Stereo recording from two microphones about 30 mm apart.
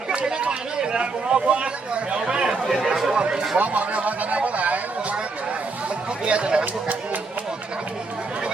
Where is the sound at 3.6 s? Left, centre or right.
Right.